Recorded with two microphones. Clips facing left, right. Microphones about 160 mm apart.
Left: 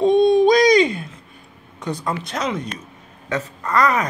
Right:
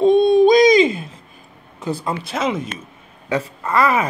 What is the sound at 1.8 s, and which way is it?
Speech, 5° right (ahead or behind).